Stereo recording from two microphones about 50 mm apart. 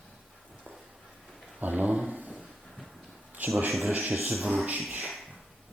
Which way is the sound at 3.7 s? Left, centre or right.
Centre.